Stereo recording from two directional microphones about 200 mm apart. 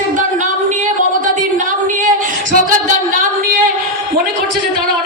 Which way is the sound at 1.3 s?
40° right (ahead or behind).